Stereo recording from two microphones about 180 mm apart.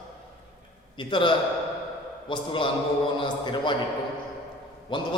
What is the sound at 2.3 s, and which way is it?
A man's voice, 25° left (ahead or behind).